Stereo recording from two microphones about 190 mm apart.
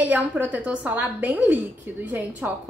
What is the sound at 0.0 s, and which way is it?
A woman's voice, 10° right (ahead or behind).